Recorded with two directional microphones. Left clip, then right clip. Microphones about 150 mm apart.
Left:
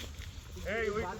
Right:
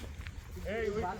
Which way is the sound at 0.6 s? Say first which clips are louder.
Left 1 dB; 30° right (ahead or behind).